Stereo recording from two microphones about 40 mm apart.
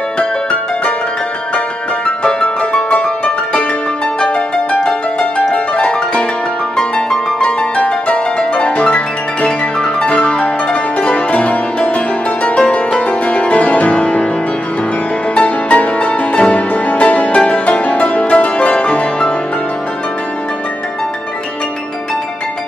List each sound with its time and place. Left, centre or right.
0.2 s music: left
2.0 s music: left
5.5 s music: left
15.3 s music: left